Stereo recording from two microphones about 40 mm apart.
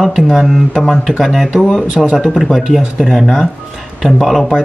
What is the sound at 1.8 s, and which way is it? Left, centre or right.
Speech, right.